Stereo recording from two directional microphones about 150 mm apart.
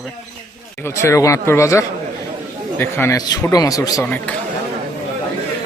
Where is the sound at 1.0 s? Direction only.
20° left (ahead or behind).